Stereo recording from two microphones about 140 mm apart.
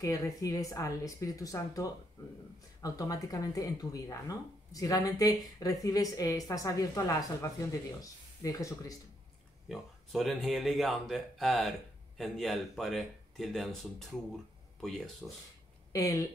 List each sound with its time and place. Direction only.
0.0 s speech: 25° left (ahead or behind)
9.7 s speech: centre (ahead or behind)
15.9 s speech: 25° left (ahead or behind)